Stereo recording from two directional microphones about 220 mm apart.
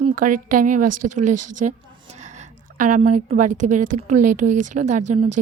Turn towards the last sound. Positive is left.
turn(degrees=-30)  # may be behind; listen again after turning